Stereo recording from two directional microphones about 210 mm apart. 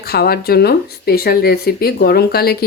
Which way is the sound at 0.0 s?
50° left (ahead or behind).